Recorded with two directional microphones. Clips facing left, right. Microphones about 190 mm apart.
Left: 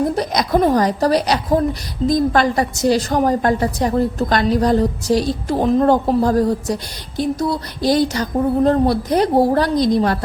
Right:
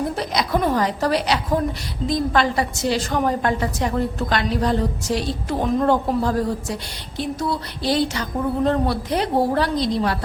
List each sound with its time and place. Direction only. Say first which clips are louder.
0.2 s a woman's voice: left 5 dB; 40° left (ahead or behind)